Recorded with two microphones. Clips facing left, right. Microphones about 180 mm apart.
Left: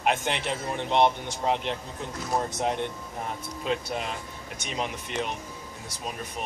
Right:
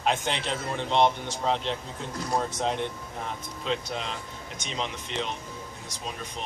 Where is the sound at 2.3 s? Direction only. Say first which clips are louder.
Left 1 dB; 10° left (ahead or behind).